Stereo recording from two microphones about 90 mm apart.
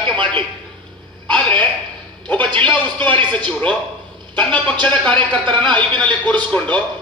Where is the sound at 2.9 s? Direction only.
65° right (ahead or behind).